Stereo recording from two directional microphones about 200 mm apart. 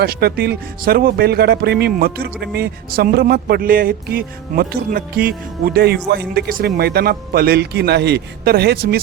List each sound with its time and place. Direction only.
0.0 s speech: 50° right (ahead or behind)